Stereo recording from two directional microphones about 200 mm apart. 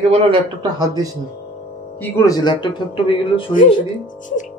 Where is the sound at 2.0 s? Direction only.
15° left (ahead or behind).